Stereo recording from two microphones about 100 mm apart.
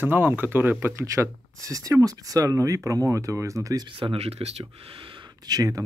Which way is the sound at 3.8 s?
60° right (ahead or behind).